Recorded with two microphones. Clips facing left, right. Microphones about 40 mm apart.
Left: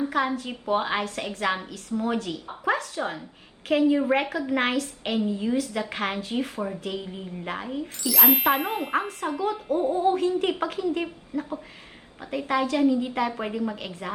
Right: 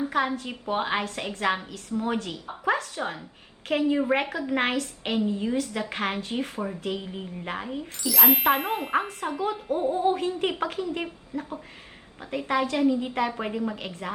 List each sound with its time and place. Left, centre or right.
0.0 s speech: centre
9.9 s speech: right
10.6 s speech: centre